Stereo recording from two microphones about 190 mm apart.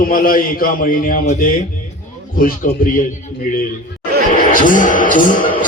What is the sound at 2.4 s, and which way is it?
Speech, 50° left (ahead or behind).